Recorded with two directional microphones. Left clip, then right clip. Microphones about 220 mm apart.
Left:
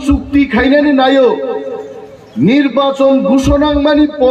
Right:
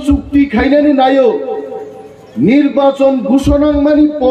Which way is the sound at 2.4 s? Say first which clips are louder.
Right 1 dB; 50° left (ahead or behind).